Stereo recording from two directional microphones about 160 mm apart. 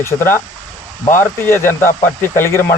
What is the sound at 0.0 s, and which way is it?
Speech, 15° left (ahead or behind).